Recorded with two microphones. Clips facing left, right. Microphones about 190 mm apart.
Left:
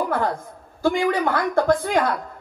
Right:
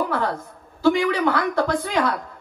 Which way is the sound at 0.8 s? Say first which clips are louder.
Right 2 dB; 50° left (ahead or behind).